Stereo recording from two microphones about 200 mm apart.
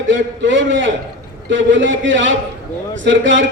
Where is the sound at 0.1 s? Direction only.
65° right (ahead or behind).